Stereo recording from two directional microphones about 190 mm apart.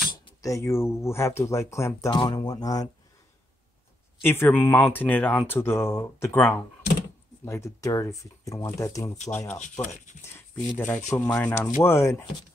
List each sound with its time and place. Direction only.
0.1 s speech: 15° left (ahead or behind)
4.2 s speech: 10° left (ahead or behind)
9.6 s speech: 40° left (ahead or behind)
10.2 s speech: 15° left (ahead or behind)